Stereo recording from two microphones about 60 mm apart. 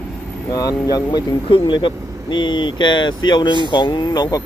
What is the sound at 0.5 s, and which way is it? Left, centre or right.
Speech, left.